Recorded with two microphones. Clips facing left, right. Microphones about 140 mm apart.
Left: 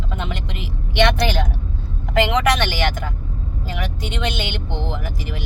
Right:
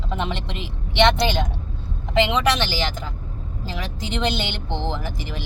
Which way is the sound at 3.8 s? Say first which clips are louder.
Right 1 dB; 35° right (ahead or behind).